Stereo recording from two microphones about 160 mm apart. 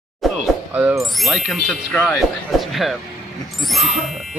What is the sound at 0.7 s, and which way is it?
Speech, 5° right (ahead or behind).